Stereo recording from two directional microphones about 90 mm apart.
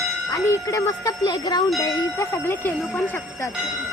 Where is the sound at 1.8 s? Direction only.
35° left (ahead or behind).